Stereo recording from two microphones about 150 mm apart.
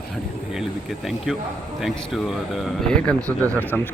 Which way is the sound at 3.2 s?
20° right (ahead or behind).